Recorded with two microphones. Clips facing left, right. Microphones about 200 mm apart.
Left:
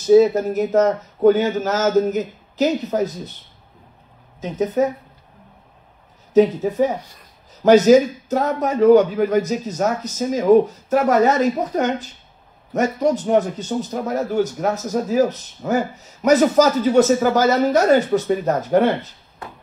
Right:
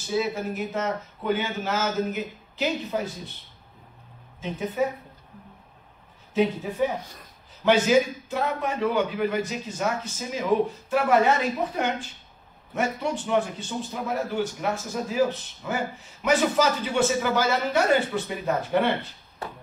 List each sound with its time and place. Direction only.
0.0 s a man's voice: 40° left (ahead or behind)
4.4 s a man's voice: 40° left (ahead or behind)
6.3 s a man's voice: 40° left (ahead or behind)